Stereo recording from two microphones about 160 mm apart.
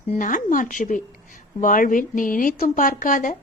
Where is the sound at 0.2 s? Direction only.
55° left (ahead or behind).